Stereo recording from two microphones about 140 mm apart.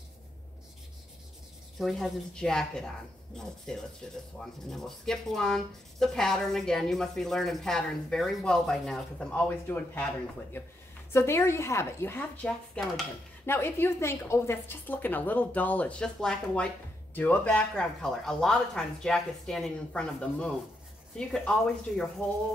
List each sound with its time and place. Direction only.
1.8 s a woman's voice: centre (ahead or behind)
13.5 s a woman's voice: 15° left (ahead or behind)